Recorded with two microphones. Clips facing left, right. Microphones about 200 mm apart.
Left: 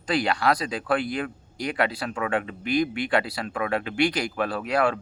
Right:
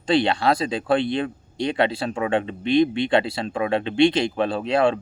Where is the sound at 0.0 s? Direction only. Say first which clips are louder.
Right 4 dB; 30° right (ahead or behind).